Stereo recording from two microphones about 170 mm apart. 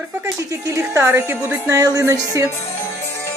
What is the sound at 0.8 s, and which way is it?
A woman's voice, 15° right (ahead or behind).